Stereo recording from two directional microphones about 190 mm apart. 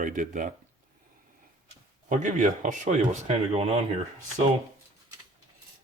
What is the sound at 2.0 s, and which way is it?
Speech, 40° right (ahead or behind).